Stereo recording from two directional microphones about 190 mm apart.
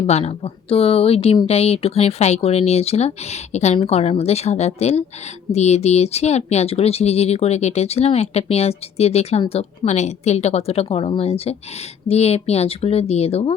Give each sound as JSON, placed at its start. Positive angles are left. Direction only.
{"t": 0.0, "sound": "speech", "side_deg": 35}